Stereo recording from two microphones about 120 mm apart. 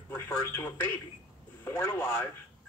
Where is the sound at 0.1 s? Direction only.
20° left (ahead or behind).